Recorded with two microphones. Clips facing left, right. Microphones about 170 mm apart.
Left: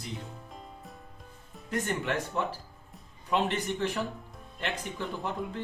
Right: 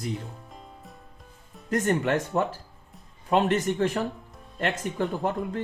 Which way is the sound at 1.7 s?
45° right (ahead or behind).